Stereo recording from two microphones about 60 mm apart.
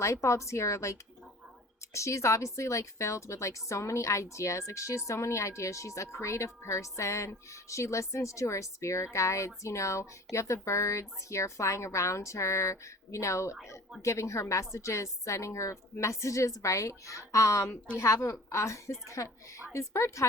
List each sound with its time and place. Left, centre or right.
0.0 s a woman's voice: left
17.9 s a woman's voice: centre
18.3 s a woman's voice: left